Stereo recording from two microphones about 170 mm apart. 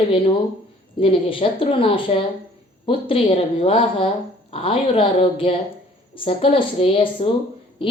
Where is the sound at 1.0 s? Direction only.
30° left (ahead or behind).